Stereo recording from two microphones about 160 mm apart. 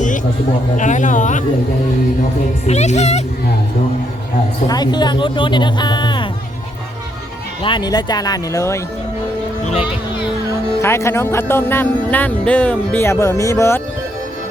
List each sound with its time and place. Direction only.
0.8 s speech: 50° left (ahead or behind)
2.6 s speech: 45° left (ahead or behind)
4.7 s speech: 25° left (ahead or behind)
7.6 s speech: 30° left (ahead or behind)
10.8 s speech: 15° left (ahead or behind)